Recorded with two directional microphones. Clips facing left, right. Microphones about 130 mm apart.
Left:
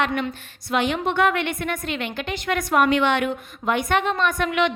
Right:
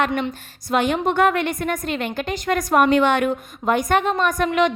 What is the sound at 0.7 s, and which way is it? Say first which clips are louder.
A woman's voice: right 3 dB; 45° right (ahead or behind).